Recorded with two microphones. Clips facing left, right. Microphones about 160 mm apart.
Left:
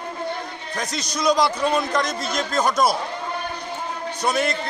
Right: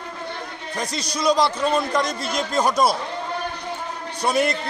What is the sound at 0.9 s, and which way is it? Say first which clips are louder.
Speech: even; 35° right (ahead or behind).